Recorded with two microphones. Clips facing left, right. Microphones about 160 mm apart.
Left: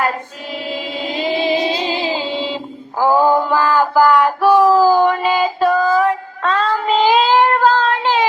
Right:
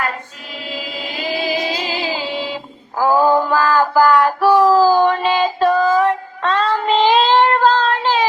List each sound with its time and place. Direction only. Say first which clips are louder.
0.7 s music: left 3 dB; 30° left (ahead or behind)
3.0 s a sound: left 1 dB; 20° left (ahead or behind)
6.0 s child singing: even; centre (ahead or behind)